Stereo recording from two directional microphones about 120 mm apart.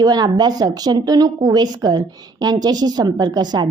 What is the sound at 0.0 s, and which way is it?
A woman's voice, 35° right (ahead or behind).